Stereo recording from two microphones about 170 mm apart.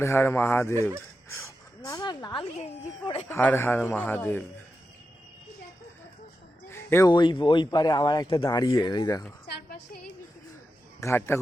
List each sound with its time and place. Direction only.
0.0 s a man's voice: 15° left (ahead or behind)
1.9 s speech: 25° left (ahead or behind)
3.2 s a man's voice: 10° left (ahead or behind)
6.7 s a sound: 15° left (ahead or behind)
7.1 s speech: 25° left (ahead or behind)
9.5 s music: 60° left (ahead or behind)
11.0 s a man's voice: 15° left (ahead or behind)